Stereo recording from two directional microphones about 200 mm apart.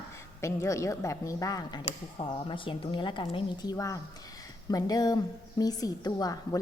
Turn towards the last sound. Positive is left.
turn(degrees=20)  # may be behind; listen again after turning